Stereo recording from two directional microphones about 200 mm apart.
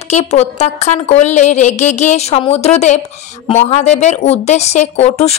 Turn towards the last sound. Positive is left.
turn(degrees=30)  # may be behind; listen again after turning